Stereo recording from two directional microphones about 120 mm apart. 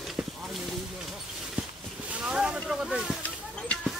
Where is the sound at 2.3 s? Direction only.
5° right (ahead or behind).